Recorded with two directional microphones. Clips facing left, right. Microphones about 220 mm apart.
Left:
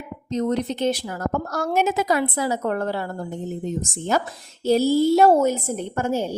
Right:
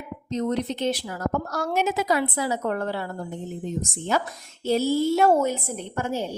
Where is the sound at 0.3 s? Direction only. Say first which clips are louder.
Left 3 dB; 45° left (ahead or behind).